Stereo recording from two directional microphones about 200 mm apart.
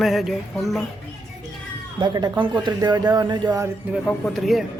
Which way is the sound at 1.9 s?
20° right (ahead or behind).